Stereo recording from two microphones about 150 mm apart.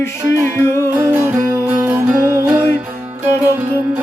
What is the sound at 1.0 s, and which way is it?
Music, 15° right (ahead or behind).